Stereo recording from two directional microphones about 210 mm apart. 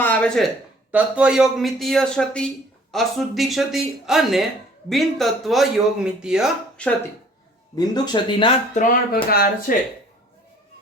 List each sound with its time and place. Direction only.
0.0 s a man's voice: 5° left (ahead or behind)
7.8 s speech: 20° left (ahead or behind)
8.7 s speech: 40° left (ahead or behind)